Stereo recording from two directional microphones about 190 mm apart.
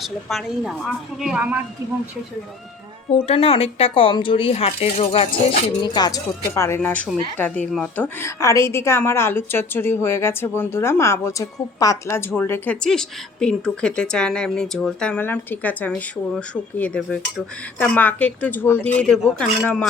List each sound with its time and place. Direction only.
0.0 s a woman's voice: centre (ahead or behind)
3.2 s a woman's voice: 30° left (ahead or behind); by 19.9 s 5° left (ahead or behind)